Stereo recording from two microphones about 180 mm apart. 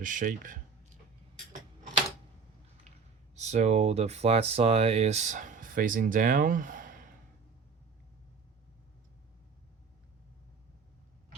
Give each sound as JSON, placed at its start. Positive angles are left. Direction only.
{"t": 0.0, "sound": "speech", "side_deg": -50}
{"t": 3.3, "sound": "speech", "side_deg": -40}